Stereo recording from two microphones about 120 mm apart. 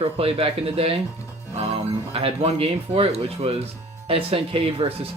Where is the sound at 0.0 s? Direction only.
55° right (ahead or behind).